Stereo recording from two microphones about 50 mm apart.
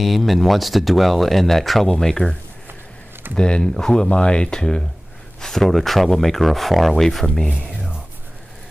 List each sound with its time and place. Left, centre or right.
0.0 s speech: centre
3.3 s speech: centre